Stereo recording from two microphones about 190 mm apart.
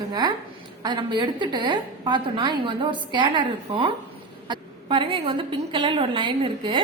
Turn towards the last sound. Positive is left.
turn(degrees=-25)  # may be behind; listen again after turning